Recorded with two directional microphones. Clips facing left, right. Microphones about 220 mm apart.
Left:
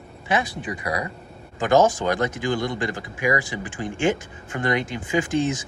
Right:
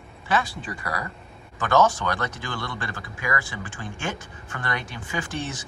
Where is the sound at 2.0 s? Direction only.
20° left (ahead or behind).